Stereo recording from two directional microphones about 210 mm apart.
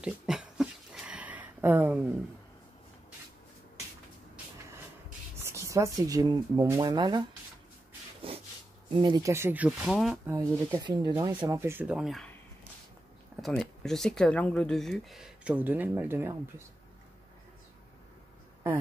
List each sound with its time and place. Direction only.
0.0 s a sound: 5° right (ahead or behind)
5.4 s speech: 15° right (ahead or behind)
8.3 s a sound: 25° right (ahead or behind)
8.9 s speech: 20° right (ahead or behind); by 10.3 s centre (ahead or behind)
10.3 s speech: 15° right (ahead or behind)
13.6 s speech: centre (ahead or behind)